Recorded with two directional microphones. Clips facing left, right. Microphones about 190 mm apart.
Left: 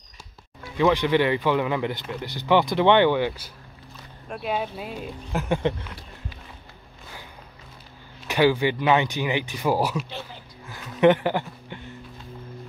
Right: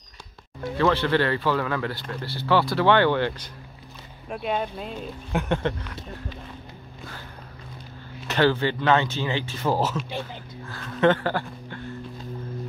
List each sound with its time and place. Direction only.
0.7 s speech: 15° left (ahead or behind)
8.3 s speech: 10° left (ahead or behind)
10.7 s music: 15° left (ahead or behind)